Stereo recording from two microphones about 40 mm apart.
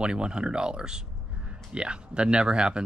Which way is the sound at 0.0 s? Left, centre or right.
Right.